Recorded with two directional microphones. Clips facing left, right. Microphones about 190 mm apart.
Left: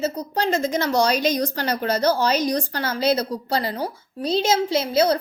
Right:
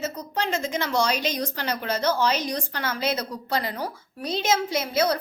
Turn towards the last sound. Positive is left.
turn(degrees=30)  # may be behind; listen again after turning